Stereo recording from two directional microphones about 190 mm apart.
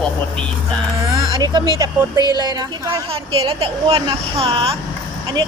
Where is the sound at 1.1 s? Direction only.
20° right (ahead or behind).